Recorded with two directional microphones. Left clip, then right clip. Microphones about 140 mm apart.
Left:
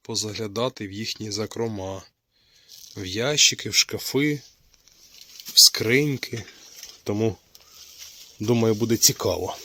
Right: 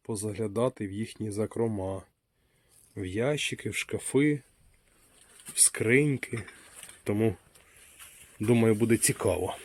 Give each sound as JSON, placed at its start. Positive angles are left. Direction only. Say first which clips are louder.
{"t": 0.3, "sound": "speech", "louder": "right 2 dB", "side_deg": 0}
{"t": 3.3, "sound": "speech", "louder": "left 12 dB", "side_deg": 20}
{"t": 5.5, "sound": "speech", "louder": "left 9 dB", "side_deg": 20}
{"t": 8.4, "sound": "speech", "louder": "left 3 dB", "side_deg": 20}
{"t": 9.1, "sound": "speech", "louder": "left 3 dB", "side_deg": 5}